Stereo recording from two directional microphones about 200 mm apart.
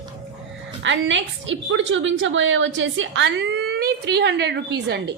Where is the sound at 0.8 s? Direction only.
65° right (ahead or behind).